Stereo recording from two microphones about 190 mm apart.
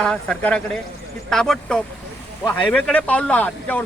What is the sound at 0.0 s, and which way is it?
Speech, 5° left (ahead or behind).